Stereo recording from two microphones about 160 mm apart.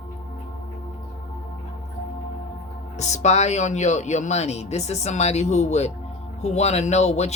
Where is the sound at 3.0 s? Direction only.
45° left (ahead or behind).